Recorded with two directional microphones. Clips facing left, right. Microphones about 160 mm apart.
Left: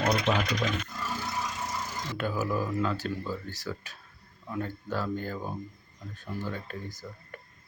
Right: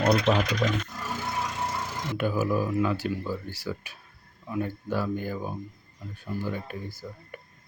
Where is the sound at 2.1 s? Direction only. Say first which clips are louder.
Right 4 dB; 15° right (ahead or behind).